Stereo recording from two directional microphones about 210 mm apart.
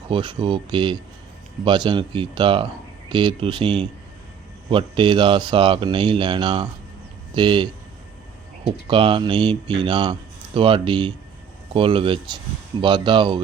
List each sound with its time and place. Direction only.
0.1 s speech: 25° right (ahead or behind)
8.9 s speech: 25° right (ahead or behind)